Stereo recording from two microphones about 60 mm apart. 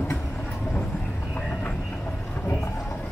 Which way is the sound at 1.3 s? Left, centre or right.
Left.